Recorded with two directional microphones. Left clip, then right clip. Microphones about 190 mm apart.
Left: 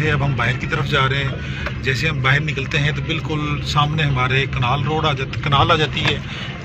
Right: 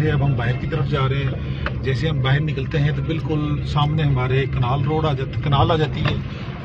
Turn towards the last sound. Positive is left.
turn(degrees=-15)  # may be behind; listen again after turning